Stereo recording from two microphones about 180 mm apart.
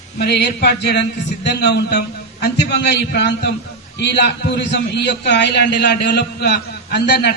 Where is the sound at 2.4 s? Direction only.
70° left (ahead or behind).